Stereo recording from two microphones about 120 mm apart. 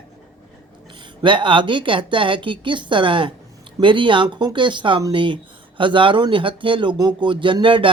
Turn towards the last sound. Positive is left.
turn(degrees=-45)  # may be behind; listen again after turning